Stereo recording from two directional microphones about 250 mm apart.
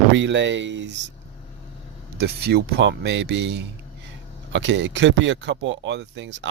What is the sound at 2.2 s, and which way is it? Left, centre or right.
Speech, right.